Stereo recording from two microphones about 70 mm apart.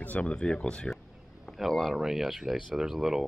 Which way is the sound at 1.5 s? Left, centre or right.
Centre.